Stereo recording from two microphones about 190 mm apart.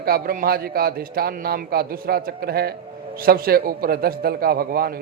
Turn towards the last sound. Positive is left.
turn(degrees=-50)  # may be behind; listen again after turning